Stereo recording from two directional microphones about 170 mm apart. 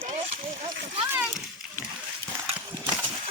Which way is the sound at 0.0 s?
35° right (ahead or behind).